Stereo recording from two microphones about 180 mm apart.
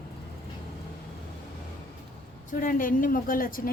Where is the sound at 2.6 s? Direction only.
50° left (ahead or behind).